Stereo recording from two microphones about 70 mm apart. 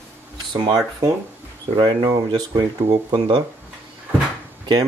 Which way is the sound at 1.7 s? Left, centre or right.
Right.